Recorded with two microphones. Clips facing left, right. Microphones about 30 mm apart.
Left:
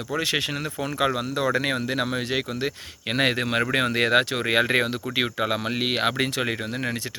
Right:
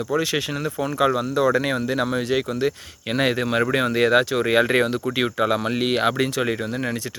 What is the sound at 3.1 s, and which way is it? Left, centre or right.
Speech, left.